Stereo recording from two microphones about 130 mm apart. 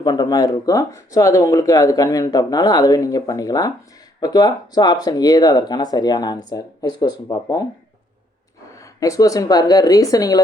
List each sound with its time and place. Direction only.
0.0 s speech: 30° left (ahead or behind)
8.7 s speech: 25° left (ahead or behind)